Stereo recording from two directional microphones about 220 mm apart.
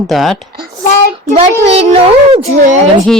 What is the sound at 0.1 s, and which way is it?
Speech, centre (ahead or behind).